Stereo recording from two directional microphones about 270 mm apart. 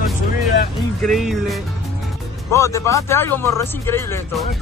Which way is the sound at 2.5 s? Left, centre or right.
Centre.